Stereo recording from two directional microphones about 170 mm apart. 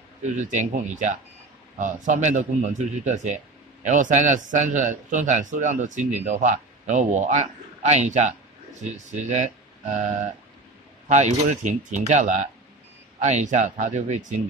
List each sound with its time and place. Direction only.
0.4 s a man's voice: 45° right (ahead or behind)